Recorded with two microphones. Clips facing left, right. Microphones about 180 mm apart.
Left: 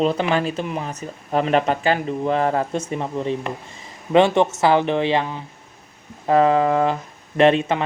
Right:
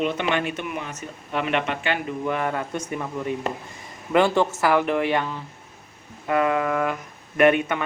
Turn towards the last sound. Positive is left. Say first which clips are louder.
# left 3 dB
turn(degrees=25)  # may be behind; listen again after turning